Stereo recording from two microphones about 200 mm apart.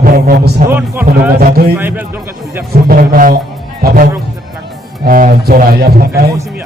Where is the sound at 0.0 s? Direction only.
50° right (ahead or behind).